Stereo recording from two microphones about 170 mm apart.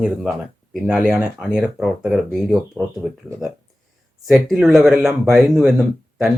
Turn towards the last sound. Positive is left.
turn(degrees=-5)  # may be behind; listen again after turning